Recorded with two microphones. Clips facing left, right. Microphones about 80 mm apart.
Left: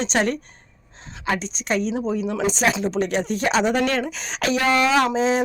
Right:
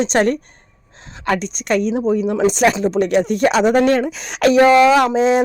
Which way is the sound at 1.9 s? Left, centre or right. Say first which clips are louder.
Right 7 dB; right.